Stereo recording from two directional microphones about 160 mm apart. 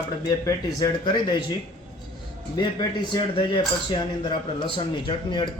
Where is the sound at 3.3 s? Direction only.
35° left (ahead or behind).